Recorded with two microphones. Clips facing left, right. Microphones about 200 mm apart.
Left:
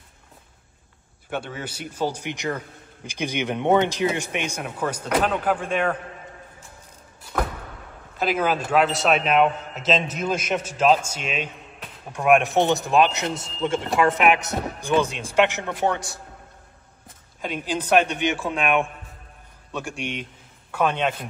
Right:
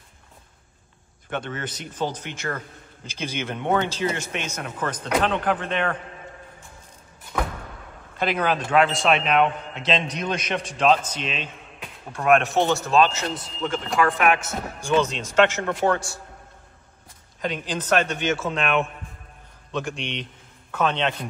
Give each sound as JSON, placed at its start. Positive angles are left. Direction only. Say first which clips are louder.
{"t": 1.3, "sound": "a man's voice", "louder": "even", "side_deg": 10}
{"t": 8.2, "sound": "a man's voice", "louder": "left 1 dB", "side_deg": 5}
{"t": 17.4, "sound": "a man's voice", "louder": "even", "side_deg": 5}
{"t": 20.7, "sound": "a man's voice", "louder": "left 1 dB", "side_deg": 10}